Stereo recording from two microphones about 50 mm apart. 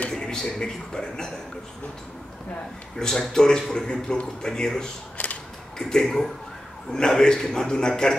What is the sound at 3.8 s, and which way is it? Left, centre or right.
Speech, centre.